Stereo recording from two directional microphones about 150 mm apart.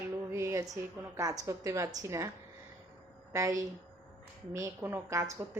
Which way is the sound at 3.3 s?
20° right (ahead or behind).